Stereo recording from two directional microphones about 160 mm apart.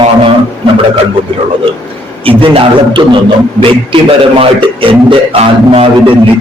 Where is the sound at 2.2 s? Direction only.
35° right (ahead or behind).